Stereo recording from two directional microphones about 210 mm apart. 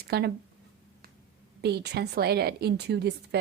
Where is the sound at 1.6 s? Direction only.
50° right (ahead or behind).